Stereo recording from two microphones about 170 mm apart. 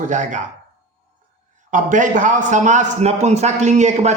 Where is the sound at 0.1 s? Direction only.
45° right (ahead or behind).